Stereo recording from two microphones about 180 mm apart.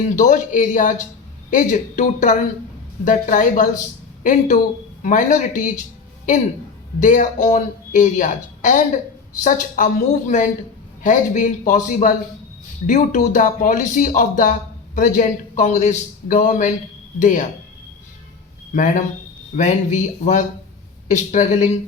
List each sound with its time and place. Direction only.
0.2 s speech: 45° left (ahead or behind)
7.0 s speech: 45° left (ahead or behind)
18.7 s speech: 45° left (ahead or behind)